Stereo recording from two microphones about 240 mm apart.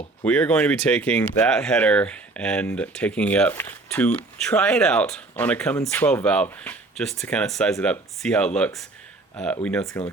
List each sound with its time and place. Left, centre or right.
0.3 s speech: centre